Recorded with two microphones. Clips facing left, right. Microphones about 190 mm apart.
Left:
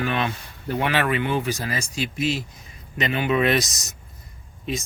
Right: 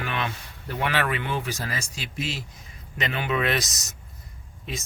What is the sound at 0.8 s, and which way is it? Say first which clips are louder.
Speech: left 3 dB; 20° left (ahead or behind).